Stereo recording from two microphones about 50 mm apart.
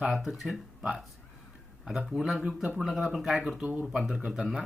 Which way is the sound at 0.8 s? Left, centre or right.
Centre.